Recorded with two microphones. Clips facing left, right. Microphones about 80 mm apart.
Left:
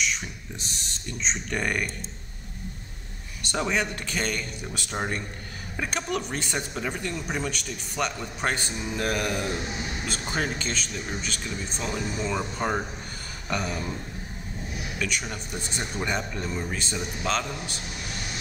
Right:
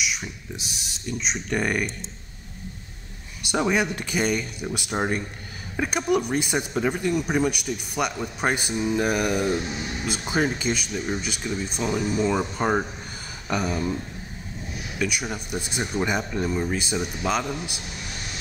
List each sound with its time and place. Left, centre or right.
0.0 s speech: centre
3.4 s speech: centre
15.0 s speech: centre